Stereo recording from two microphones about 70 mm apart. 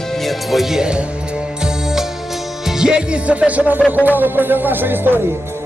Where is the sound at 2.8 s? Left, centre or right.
Centre.